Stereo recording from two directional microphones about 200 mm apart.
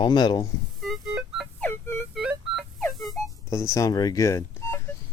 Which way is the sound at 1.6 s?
10° left (ahead or behind).